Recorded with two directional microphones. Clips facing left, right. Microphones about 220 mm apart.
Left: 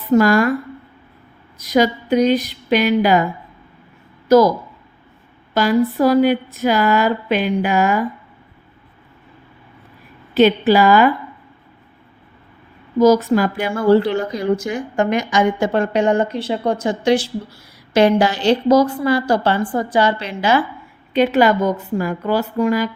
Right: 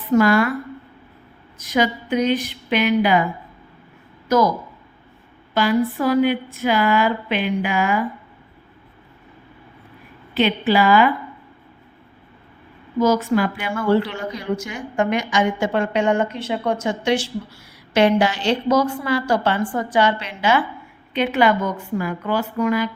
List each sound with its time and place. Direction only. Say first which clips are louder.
0.1 s speech: left 2 dB; 40° left (ahead or behind)
1.6 s speech: left 4 dB; 40° left (ahead or behind)
4.3 s speech: left 6 dB; 35° left (ahead or behind)
5.5 s speech: left 3 dB; 40° left (ahead or behind)
10.3 s speech: left 5 dB; 45° left (ahead or behind)
13.0 s speech: left 5 dB; 40° left (ahead or behind)